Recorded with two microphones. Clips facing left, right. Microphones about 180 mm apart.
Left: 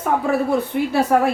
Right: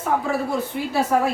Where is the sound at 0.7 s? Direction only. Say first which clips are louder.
Left 3 dB; 60° left (ahead or behind).